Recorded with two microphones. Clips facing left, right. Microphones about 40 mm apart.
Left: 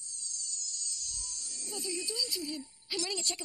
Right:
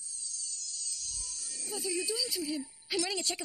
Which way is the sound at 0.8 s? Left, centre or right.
Centre.